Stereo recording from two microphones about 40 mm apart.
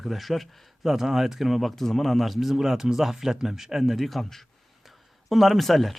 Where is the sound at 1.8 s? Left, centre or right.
Centre.